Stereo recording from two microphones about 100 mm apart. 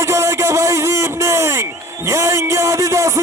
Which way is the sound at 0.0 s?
30° right (ahead or behind).